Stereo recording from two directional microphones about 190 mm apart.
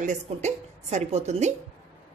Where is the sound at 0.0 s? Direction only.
40° right (ahead or behind).